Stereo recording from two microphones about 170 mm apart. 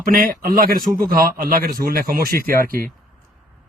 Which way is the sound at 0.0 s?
55° right (ahead or behind).